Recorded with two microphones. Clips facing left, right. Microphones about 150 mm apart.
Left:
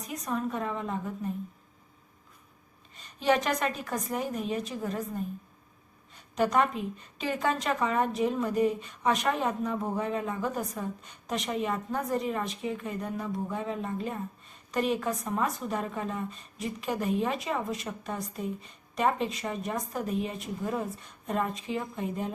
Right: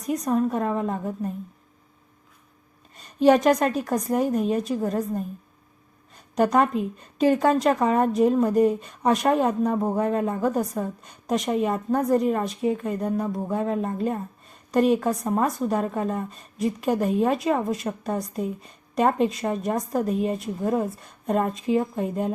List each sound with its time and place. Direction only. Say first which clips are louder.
0.3 s a woman's voice: right 7 dB; 45° right (ahead or behind)
2.9 s a woman's voice: right 9 dB; 40° right (ahead or behind)
6.3 s a woman's voice: right 6 dB; 40° right (ahead or behind)